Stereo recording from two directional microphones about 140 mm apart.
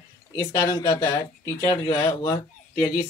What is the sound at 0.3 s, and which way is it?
Speech, 25° left (ahead or behind).